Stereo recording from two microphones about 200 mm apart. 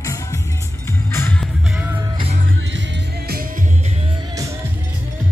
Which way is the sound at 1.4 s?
10° right (ahead or behind).